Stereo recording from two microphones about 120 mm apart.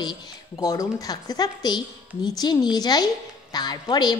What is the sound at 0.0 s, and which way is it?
A woman's voice, 35° left (ahead or behind).